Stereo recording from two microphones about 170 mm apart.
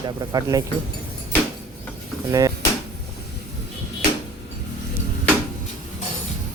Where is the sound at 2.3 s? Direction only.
20° right (ahead or behind).